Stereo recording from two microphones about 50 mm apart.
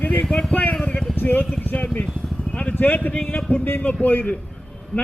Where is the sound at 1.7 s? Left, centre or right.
Left.